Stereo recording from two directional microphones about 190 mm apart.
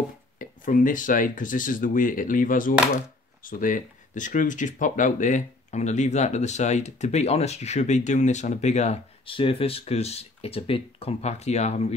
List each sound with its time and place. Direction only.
0.4 s speech: 45° left (ahead or behind)